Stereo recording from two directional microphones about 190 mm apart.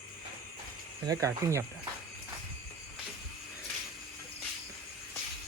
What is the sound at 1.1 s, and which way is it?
Speech, 15° right (ahead or behind).